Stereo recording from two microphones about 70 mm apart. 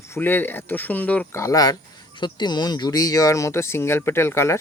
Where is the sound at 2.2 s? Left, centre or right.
Left.